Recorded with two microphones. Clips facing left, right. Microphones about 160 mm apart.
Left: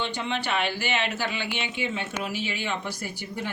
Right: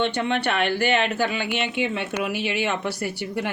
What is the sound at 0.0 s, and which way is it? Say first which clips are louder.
Speech: right 6 dB; 65° right (ahead or behind).